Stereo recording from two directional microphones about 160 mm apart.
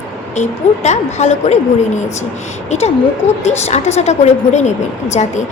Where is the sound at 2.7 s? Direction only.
40° left (ahead or behind).